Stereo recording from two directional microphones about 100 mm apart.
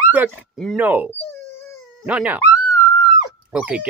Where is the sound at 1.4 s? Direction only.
25° left (ahead or behind).